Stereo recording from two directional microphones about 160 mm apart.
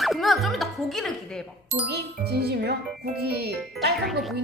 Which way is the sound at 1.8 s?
90° right.